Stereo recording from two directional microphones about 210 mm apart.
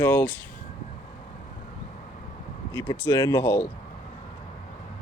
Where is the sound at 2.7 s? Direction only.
20° left (ahead or behind).